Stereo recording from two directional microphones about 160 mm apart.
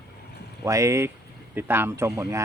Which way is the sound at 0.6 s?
20° right (ahead or behind).